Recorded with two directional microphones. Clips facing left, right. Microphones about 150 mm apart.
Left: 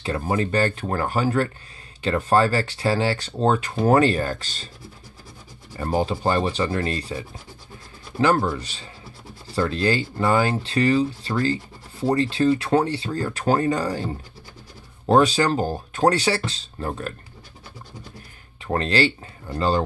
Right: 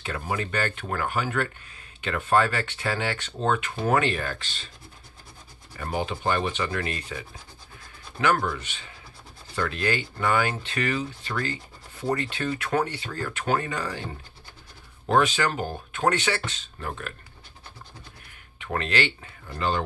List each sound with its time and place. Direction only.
0.0 s speech: 35° left (ahead or behind)
5.8 s speech: 35° left (ahead or behind)
15.0 s speech: 35° left (ahead or behind)
18.6 s speech: 35° left (ahead or behind)